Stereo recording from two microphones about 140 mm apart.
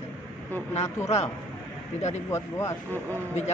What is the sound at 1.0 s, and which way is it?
Speech, 50° left (ahead or behind).